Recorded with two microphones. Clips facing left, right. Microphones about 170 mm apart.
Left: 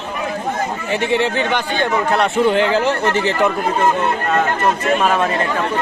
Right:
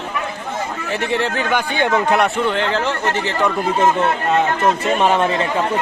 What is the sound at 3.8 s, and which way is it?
Speech, 20° right (ahead or behind).